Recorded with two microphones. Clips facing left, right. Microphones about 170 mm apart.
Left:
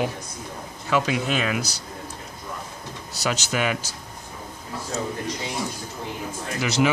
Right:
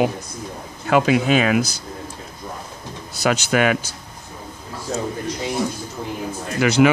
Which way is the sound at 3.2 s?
60° right (ahead or behind).